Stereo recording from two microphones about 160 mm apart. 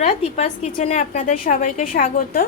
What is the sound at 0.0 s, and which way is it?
A woman's voice, 40° left (ahead or behind).